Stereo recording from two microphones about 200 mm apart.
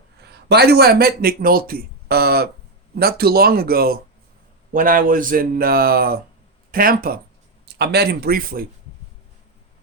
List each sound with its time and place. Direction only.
0.3 s a man's voice: 55° right (ahead or behind)